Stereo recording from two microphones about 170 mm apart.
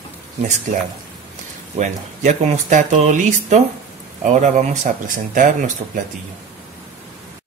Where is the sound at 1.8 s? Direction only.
45° right (ahead or behind).